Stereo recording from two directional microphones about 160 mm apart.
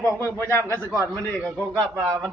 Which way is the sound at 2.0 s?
30° right (ahead or behind).